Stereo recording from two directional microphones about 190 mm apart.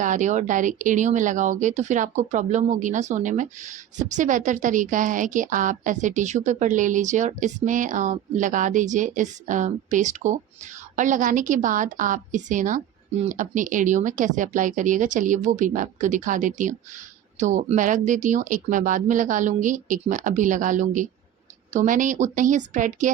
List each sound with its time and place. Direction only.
0.0 s a woman's voice: 40° right (ahead or behind)